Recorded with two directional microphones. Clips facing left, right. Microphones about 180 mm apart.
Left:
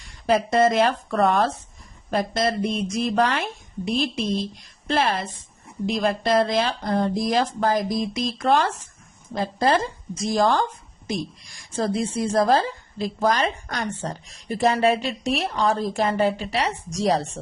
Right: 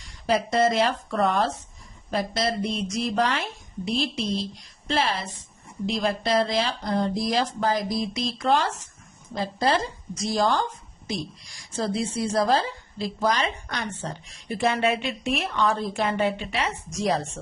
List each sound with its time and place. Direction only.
0.3 s a woman's voice: 50° left (ahead or behind); by 17.4 s 35° left (ahead or behind)